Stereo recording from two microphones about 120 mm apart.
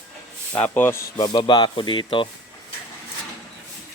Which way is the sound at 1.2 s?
40° left (ahead or behind).